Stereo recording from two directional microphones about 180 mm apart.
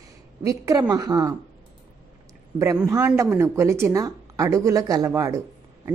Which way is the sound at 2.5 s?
15° right (ahead or behind).